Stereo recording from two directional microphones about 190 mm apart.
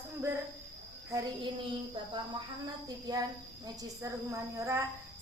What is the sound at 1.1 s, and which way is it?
Child singing, 25° right (ahead or behind).